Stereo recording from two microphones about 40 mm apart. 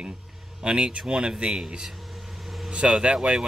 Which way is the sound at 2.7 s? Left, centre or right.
Right.